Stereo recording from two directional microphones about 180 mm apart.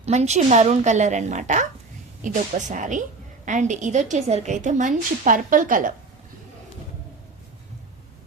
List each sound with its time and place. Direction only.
0.0 s a woman's voice: 40° right (ahead or behind)